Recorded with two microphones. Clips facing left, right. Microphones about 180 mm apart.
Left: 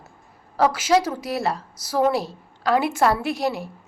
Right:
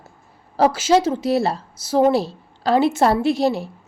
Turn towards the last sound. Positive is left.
turn(degrees=-30)  # may be behind; listen again after turning